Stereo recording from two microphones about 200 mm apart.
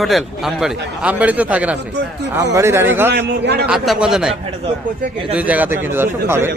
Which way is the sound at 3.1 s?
55° right (ahead or behind).